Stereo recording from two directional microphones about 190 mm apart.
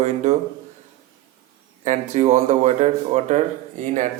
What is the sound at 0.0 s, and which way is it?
Speech, 35° right (ahead or behind).